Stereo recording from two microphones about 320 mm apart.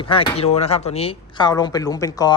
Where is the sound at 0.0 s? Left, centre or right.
Centre.